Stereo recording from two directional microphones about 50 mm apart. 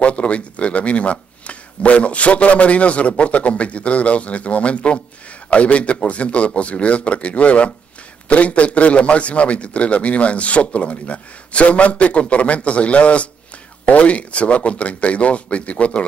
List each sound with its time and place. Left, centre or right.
0.0 s speech: left